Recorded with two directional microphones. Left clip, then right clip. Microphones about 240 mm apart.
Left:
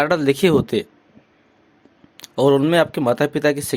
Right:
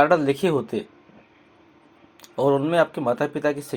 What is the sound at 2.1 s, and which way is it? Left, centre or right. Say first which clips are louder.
Speech: left 5 dB; left.